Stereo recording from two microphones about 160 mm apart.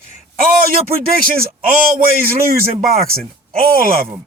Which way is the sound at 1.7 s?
60° right (ahead or behind).